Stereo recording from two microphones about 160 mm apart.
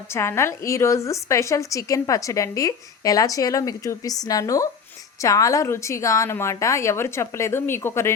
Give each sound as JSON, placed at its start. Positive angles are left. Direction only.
{"t": 0.1, "sound": "a woman's voice", "side_deg": 15}